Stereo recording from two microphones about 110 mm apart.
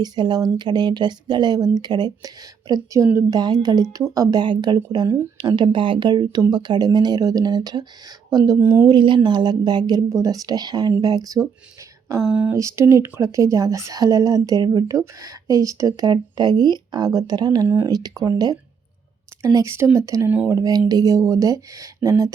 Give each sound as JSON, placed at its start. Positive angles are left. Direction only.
{"t": 0.0, "sound": "speech", "side_deg": -40}
{"t": 5.0, "sound": "speech", "side_deg": -20}
{"t": 5.4, "sound": "speech", "side_deg": -40}
{"t": 8.5, "sound": "speech", "side_deg": -20}
{"t": 8.9, "sound": "speech", "side_deg": -45}
{"t": 12.2, "sound": "speech", "side_deg": -10}
{"t": 12.5, "sound": "speech", "side_deg": -25}